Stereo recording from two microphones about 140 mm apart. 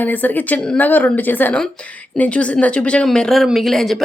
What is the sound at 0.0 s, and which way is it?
Speech, 10° left (ahead or behind).